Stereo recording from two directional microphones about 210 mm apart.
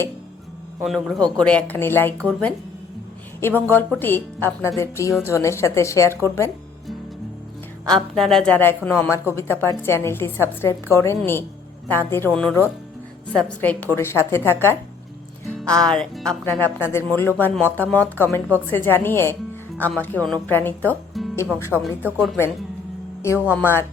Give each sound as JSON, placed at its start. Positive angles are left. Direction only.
{"t": 0.8, "sound": "speech", "side_deg": 0}
{"t": 3.4, "sound": "a woman's voice", "side_deg": 10}
{"t": 7.9, "sound": "a woman's voice", "side_deg": 0}
{"t": 23.6, "sound": "a woman's voice", "side_deg": 10}